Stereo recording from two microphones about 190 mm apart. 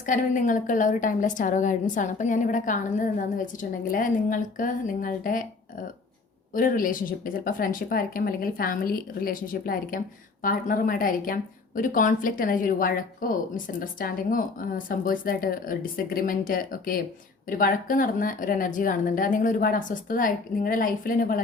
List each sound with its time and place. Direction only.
0.0 s a woman's voice: 45° left (ahead or behind)
6.5 s a woman's voice: 45° left (ahead or behind)